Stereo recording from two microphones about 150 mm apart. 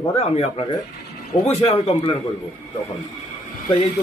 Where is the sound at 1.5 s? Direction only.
40° left (ahead or behind).